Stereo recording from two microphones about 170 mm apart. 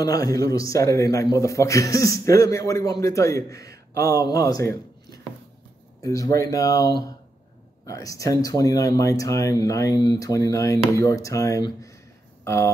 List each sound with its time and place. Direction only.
0.0 s a man's voice: 20° left (ahead or behind)